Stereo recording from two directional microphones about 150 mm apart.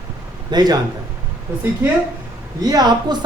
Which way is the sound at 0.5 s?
25° right (ahead or behind).